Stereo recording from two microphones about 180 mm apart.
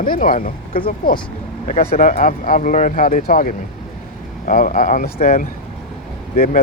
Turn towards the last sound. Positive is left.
turn(degrees=45)  # may be behind; listen again after turning